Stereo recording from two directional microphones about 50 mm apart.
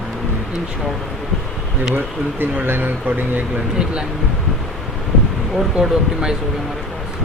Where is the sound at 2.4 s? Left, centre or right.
Right.